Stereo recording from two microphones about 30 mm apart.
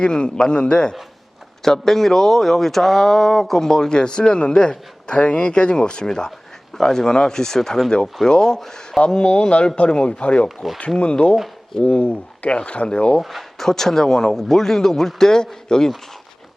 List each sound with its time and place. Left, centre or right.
0.0 s a man's voice: left
1.6 s speech: centre
9.0 s a man's voice: left
13.6 s speech: centre